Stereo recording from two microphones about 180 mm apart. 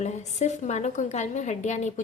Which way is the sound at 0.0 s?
40° left (ahead or behind).